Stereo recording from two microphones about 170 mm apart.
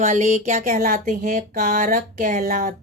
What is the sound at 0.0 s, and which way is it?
Speech, 45° right (ahead or behind).